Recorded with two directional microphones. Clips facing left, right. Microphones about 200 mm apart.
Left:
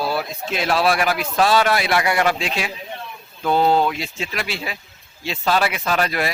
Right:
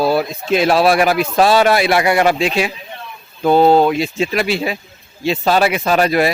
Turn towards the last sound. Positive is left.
turn(degrees=-15)  # may be behind; listen again after turning